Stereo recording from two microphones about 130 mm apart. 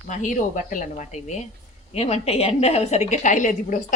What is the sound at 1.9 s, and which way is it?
A woman's voice, 50° left (ahead or behind).